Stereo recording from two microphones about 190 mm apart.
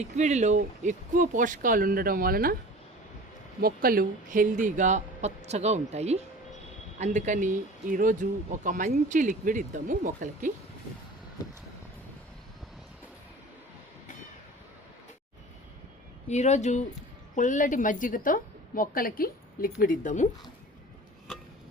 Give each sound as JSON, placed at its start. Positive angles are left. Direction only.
{"t": 0.0, "sound": "speech", "side_deg": -35}
{"t": 3.6, "sound": "speech", "side_deg": -50}
{"t": 16.3, "sound": "a woman's voice", "side_deg": 35}